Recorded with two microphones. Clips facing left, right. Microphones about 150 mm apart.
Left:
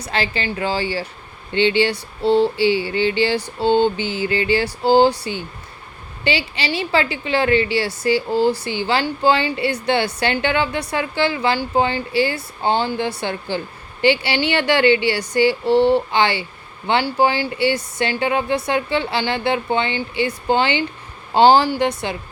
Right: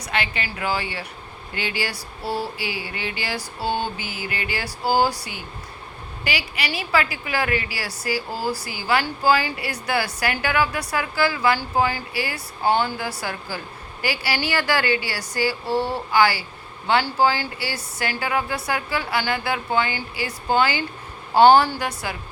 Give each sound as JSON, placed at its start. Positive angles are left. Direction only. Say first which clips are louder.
{"t": 0.0, "sound": "speech", "louder": "left 4 dB", "side_deg": 30}